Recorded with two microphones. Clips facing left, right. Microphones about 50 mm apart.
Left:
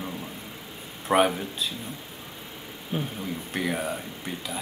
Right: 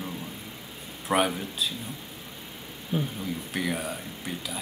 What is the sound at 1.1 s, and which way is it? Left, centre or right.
Speech, centre.